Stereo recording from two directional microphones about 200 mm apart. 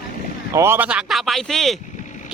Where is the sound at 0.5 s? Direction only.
10° right (ahead or behind).